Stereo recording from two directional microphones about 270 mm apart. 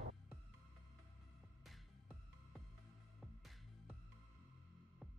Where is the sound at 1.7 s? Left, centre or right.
Centre.